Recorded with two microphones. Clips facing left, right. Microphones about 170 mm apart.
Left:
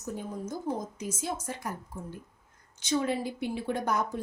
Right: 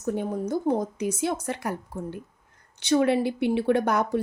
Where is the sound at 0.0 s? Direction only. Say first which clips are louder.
Right 9 dB; 70° right (ahead or behind).